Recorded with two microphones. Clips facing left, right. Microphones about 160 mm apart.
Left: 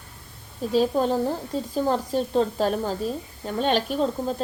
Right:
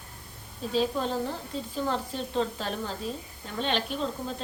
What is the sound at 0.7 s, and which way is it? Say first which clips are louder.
A woman's voice: left 6 dB; 45° left (ahead or behind).